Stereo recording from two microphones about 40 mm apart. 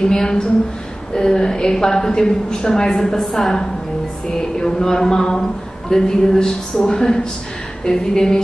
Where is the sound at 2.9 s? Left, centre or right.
Centre.